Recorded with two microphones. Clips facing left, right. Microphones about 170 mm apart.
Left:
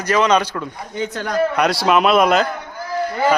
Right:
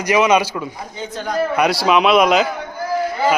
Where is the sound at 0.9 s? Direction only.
70° left (ahead or behind).